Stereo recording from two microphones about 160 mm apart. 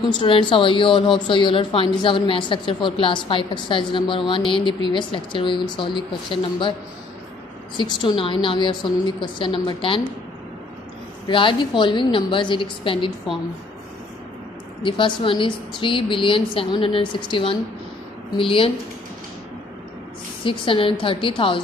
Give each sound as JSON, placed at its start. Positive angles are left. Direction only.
{"t": 0.1, "sound": "a woman's voice", "side_deg": 30}
{"t": 7.7, "sound": "a woman's voice", "side_deg": 30}
{"t": 11.2, "sound": "a woman's voice", "side_deg": 30}
{"t": 14.8, "sound": "a woman's voice", "side_deg": 30}
{"t": 20.4, "sound": "a woman's voice", "side_deg": 30}